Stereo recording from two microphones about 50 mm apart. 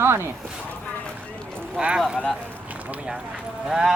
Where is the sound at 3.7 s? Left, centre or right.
Centre.